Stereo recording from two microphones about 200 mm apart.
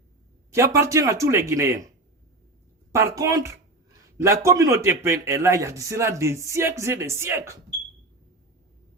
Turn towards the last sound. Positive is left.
turn(degrees=-15)  # may be behind; listen again after turning